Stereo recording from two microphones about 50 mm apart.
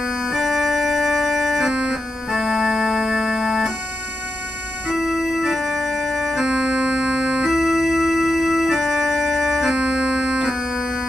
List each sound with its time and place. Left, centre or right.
0.0 s music: centre
0.4 s organ: centre
1.7 s music: centre
4.8 s organ: centre
6.4 s music: centre
7.5 s organ: centre
9.8 s music: centre